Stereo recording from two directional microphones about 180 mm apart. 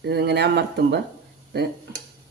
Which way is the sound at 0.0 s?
65° right (ahead or behind).